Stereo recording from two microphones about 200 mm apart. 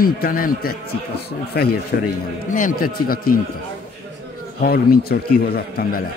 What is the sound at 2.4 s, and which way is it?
Speech, 40° left (ahead or behind).